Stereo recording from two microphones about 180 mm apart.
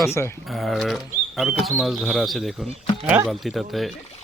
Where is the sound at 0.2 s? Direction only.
10° left (ahead or behind).